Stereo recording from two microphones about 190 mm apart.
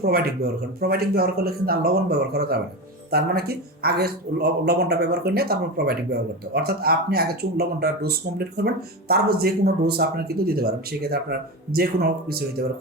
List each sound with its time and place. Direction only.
0.0 s a man's voice: 50° right (ahead or behind)